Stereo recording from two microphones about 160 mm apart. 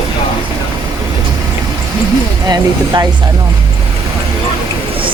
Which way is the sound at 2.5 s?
25° right (ahead or behind).